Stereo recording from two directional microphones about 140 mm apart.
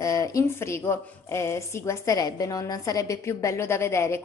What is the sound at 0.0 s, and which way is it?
A woman's voice, 25° left (ahead or behind).